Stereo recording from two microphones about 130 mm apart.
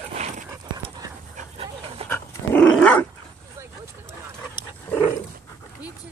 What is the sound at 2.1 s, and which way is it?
Dog, 10° left (ahead or behind).